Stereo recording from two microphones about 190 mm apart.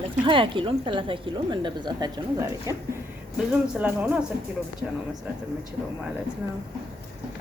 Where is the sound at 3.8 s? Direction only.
10° right (ahead or behind).